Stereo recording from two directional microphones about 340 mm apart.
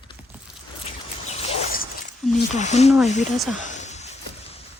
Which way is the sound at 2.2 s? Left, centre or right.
Centre.